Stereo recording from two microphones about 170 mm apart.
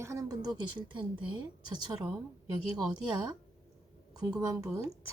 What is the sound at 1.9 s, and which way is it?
Speech, 20° right (ahead or behind).